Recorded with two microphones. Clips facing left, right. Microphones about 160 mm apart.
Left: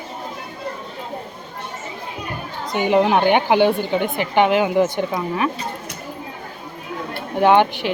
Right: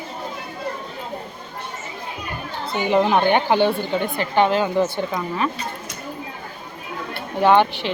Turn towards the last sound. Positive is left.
turn(degrees=15)  # may be behind; listen again after turning